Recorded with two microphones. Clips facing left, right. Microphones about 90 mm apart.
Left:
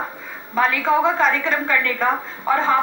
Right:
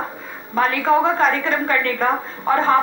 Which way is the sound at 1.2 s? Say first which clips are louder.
Right 1 dB; 40° right (ahead or behind).